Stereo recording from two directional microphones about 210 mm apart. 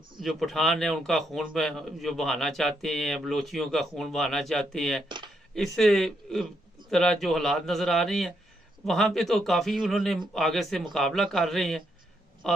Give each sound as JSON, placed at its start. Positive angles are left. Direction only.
{"t": 0.2, "sound": "a man's voice", "side_deg": 0}
{"t": 5.0, "sound": "speech", "side_deg": -20}
{"t": 5.5, "sound": "a man's voice", "side_deg": 0}